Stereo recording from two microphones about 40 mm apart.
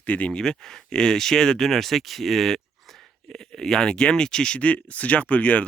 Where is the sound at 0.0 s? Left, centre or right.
Left.